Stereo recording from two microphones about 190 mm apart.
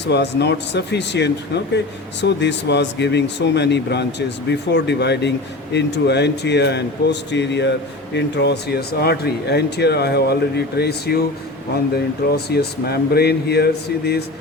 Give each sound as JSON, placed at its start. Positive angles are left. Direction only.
{"t": 0.0, "sound": "speech", "side_deg": 65}
{"t": 12.3, "sound": "speech", "side_deg": 55}